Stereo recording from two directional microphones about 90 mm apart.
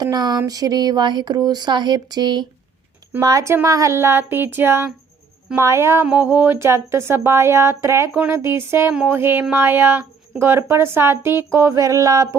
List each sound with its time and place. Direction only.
0.0 s speech: 50° right (ahead or behind)
3.2 s a sound: 40° right (ahead or behind)
3.5 s speech: 35° right (ahead or behind)
6.1 s speech: 20° right (ahead or behind)
8.1 s speech: 15° right (ahead or behind)
8.4 s speech: 30° right (ahead or behind)
11.5 s a sound: 30° right (ahead or behind)